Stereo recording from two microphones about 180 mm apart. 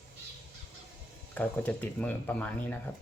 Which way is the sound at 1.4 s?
10° left (ahead or behind).